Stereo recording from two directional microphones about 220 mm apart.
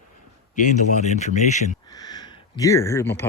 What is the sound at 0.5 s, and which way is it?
Speech, 35° left (ahead or behind).